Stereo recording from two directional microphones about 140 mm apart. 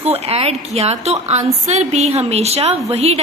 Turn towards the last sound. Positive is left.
turn(degrees=-50)  # may be behind; listen again after turning